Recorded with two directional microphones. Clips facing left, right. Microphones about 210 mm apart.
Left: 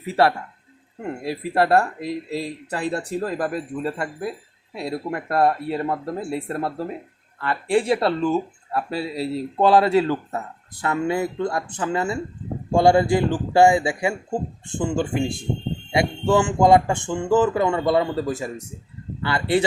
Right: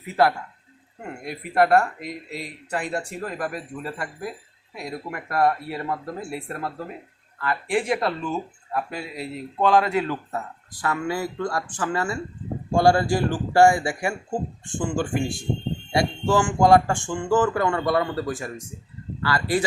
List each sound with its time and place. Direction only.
0.0 s speech: 30° left (ahead or behind)